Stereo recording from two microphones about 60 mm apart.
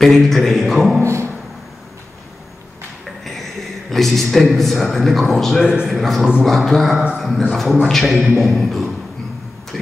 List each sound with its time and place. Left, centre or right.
0.0 s a man's voice: centre
1.0 s a sound: right
3.9 s a man's voice: centre
5.6 s a man's voice: centre
5.9 s a man's voice: centre